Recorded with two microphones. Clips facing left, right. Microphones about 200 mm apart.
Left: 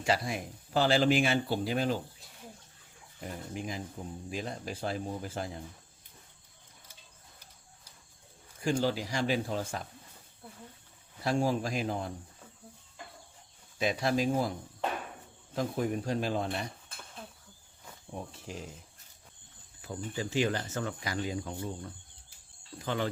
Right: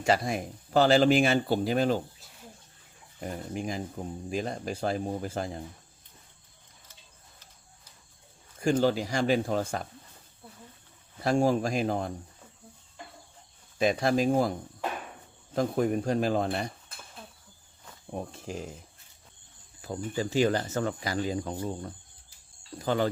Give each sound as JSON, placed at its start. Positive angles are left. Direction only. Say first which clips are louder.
{"t": 0.0, "sound": "speech", "louder": "right 4 dB", "side_deg": -45}
{"t": 3.5, "sound": "speech", "louder": "right 4 dB", "side_deg": -45}
{"t": 8.8, "sound": "speech", "louder": "right 5 dB", "side_deg": -45}
{"t": 11.2, "sound": "speech", "louder": "right 5 dB", "side_deg": -45}
{"t": 13.7, "sound": "speech", "louder": "right 4 dB", "side_deg": -45}
{"t": 15.5, "sound": "speech", "louder": "right 5 dB", "side_deg": -50}
{"t": 18.1, "sound": "speech", "louder": "right 5 dB", "side_deg": -45}
{"t": 19.8, "sound": "speech", "louder": "right 5 dB", "side_deg": -40}